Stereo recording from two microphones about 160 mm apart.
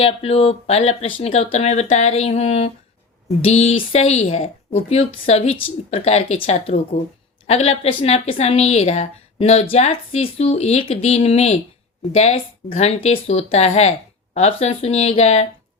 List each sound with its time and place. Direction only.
0.0 s a woman's voice: 40° left (ahead or behind)